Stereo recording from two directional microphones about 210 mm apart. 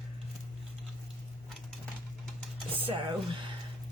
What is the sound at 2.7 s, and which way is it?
Speech, 25° right (ahead or behind).